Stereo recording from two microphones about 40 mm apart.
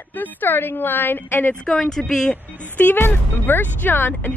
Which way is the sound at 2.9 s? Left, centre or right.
Left.